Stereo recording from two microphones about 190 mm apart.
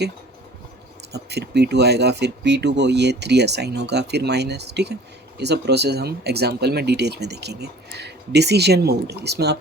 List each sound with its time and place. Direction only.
1.1 s speech: 60° right (ahead or behind)